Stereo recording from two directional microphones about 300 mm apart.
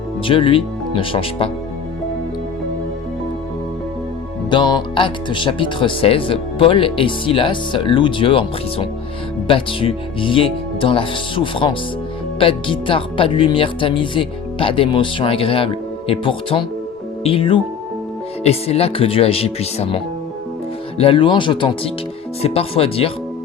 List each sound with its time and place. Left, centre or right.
0.3 s speech: centre
4.4 s speech: centre
21.0 s speech: centre